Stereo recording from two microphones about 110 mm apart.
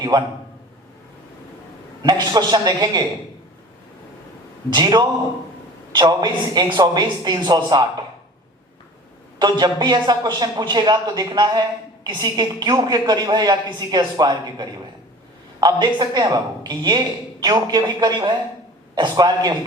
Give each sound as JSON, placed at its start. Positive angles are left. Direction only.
{"t": 0.1, "sound": "speech", "side_deg": -45}
{"t": 2.0, "sound": "a man's voice", "side_deg": -40}
{"t": 4.7, "sound": "a man's voice", "side_deg": -45}
{"t": 9.4, "sound": "a man's voice", "side_deg": -40}